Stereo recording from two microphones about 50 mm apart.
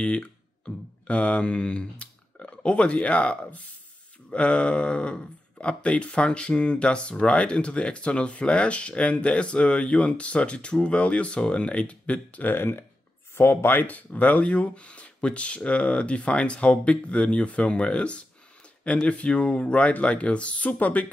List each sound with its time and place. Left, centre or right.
0.0 s mantra: left
4.3 s speech: left
12.5 s speech: left
13.8 s speech: left